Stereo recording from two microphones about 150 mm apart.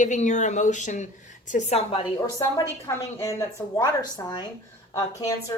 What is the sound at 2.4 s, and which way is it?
Speech, 20° left (ahead or behind).